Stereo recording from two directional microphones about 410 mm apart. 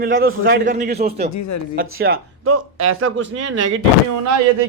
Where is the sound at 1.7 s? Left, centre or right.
Right.